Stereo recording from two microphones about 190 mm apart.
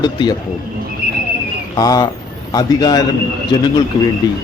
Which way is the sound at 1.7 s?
20° left (ahead or behind).